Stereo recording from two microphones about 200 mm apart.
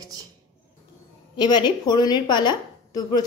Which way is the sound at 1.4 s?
20° left (ahead or behind).